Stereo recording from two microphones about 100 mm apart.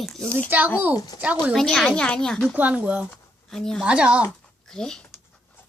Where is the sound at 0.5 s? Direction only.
20° right (ahead or behind).